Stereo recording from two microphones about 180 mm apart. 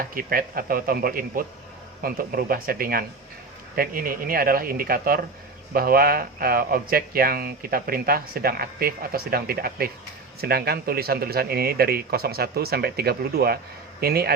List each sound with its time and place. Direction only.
0.0 s speech: 50° right (ahead or behind)